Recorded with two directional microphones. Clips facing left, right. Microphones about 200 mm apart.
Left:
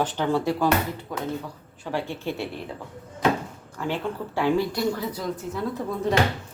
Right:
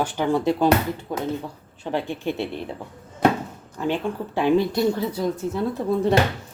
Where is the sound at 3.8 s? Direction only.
20° right (ahead or behind).